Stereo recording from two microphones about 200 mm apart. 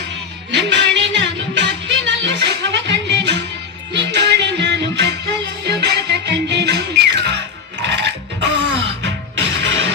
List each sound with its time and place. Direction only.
0.5 s music: 60° right (ahead or behind)